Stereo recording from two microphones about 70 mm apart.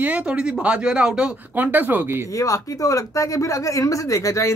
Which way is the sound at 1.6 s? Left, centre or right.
Right.